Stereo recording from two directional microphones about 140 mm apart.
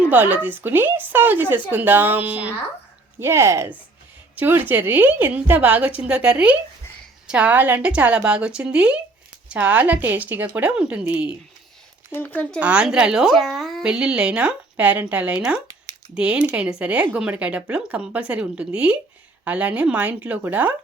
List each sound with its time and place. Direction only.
0.1 s a woman's voice: 10° right (ahead or behind)
12.1 s speech: 10° left (ahead or behind)
12.5 s a woman's voice: 10° right (ahead or behind)